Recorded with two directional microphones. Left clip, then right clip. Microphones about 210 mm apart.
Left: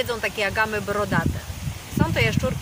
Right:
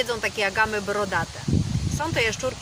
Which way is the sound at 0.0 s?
Centre (ahead or behind).